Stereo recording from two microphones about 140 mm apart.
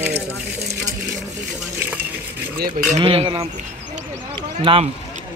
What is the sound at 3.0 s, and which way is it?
Speech, 45° right (ahead or behind).